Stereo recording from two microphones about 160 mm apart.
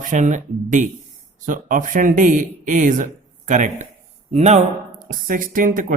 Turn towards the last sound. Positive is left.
turn(degrees=-55)  # may be behind; listen again after turning